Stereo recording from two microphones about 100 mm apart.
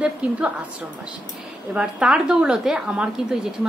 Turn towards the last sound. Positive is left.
turn(degrees=-5)  # may be behind; listen again after turning